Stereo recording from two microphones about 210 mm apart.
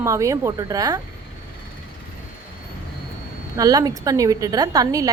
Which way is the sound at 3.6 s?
15° right (ahead or behind).